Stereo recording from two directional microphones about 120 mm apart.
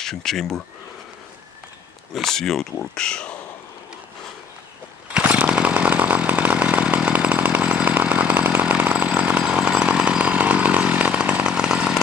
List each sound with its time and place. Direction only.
0.0 s speech: 5° left (ahead or behind)
2.1 s speech: 5° left (ahead or behind)
5.1 s chainsaw: 10° right (ahead or behind)